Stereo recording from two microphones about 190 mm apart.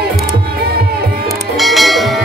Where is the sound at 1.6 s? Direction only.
Centre (ahead or behind).